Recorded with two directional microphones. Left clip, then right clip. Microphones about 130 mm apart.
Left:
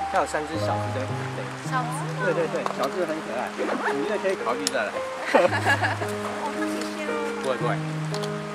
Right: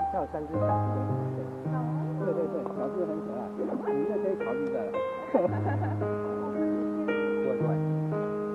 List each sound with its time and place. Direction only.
5.3 s speech: 35° right (ahead or behind)